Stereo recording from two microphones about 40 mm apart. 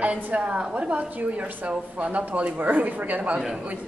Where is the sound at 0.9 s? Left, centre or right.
Right.